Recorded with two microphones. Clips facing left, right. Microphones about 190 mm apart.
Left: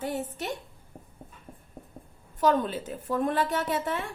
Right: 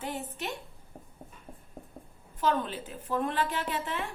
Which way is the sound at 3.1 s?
45° left (ahead or behind).